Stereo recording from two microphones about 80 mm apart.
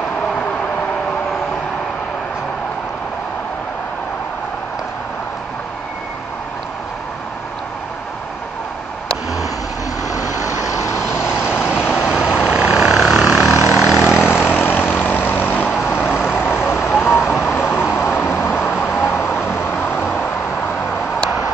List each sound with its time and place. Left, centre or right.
0.4 s vehicle: centre
10.0 s vehicle: left
12.0 s vehicle: centre
14.1 s vehicle: left